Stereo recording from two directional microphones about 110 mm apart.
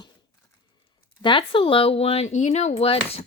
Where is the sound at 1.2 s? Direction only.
50° left (ahead or behind).